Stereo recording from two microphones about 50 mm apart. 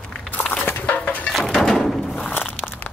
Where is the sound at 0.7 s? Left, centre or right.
Left.